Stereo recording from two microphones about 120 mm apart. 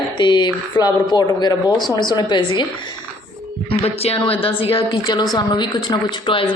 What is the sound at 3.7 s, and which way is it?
Speech, 50° left (ahead or behind).